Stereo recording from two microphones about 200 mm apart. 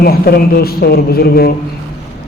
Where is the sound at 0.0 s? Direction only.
50° left (ahead or behind).